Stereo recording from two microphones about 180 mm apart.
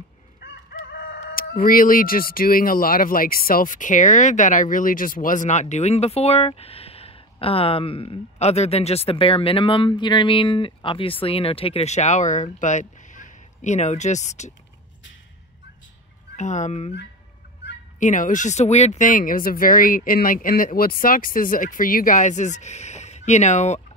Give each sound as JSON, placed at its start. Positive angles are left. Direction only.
{"t": 0.4, "sound": "crowing", "side_deg": 80}
{"t": 1.3, "sound": "speech", "side_deg": 55}
{"t": 16.3, "sound": "speech", "side_deg": 40}
{"t": 17.9, "sound": "speech", "side_deg": 45}